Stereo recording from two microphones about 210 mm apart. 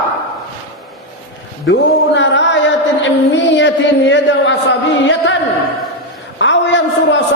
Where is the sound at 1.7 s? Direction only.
60° left (ahead or behind).